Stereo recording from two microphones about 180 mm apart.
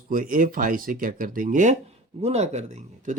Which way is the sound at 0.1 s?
50° right (ahead or behind).